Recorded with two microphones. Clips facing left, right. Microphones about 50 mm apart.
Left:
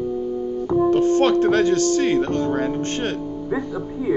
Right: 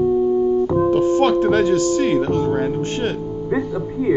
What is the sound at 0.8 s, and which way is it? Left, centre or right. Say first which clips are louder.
Speech: left 2 dB; centre.